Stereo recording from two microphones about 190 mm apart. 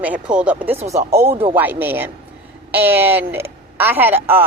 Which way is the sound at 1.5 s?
10° right (ahead or behind).